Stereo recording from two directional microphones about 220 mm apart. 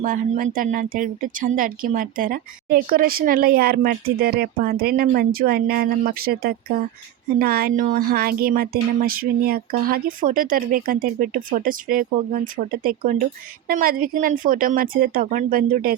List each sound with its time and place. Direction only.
0.0 s speech: 35° right (ahead or behind)